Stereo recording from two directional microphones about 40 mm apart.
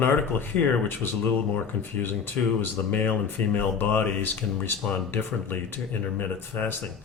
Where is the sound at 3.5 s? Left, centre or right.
Left.